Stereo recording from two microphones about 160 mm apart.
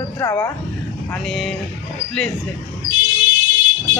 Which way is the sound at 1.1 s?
Centre (ahead or behind).